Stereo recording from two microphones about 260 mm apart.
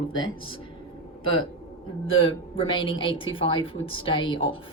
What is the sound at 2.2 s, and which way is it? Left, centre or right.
Speech, left.